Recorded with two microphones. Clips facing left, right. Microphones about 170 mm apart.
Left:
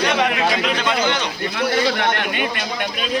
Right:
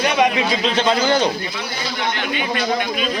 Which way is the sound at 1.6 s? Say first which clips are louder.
Left 7 dB; 60° left (ahead or behind).